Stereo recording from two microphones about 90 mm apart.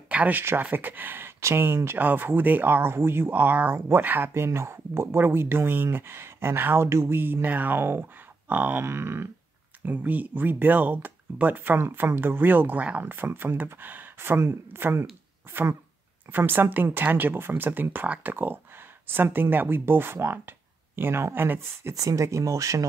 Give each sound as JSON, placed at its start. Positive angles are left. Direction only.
{"t": 0.1, "sound": "speech", "side_deg": -20}
{"t": 16.3, "sound": "speech", "side_deg": -25}